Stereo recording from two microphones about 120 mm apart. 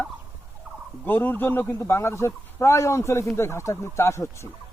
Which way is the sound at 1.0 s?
15° left (ahead or behind).